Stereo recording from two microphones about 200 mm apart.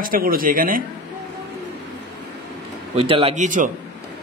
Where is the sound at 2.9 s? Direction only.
30° right (ahead or behind).